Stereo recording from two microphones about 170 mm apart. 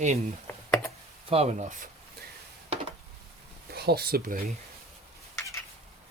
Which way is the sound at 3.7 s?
65° right (ahead or behind).